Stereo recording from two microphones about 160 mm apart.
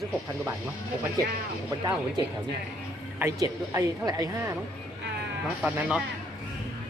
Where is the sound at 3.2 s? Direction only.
20° right (ahead or behind).